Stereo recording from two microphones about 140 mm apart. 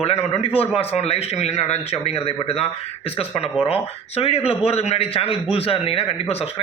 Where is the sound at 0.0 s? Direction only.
50° left (ahead or behind).